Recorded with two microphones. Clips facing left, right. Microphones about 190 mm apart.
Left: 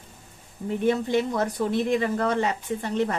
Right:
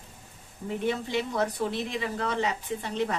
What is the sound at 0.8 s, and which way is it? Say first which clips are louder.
A woman's voice: left 7 dB; 50° left (ahead or behind).